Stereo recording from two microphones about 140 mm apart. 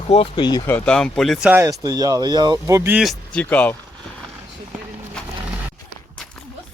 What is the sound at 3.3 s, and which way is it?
Speech, 10° left (ahead or behind).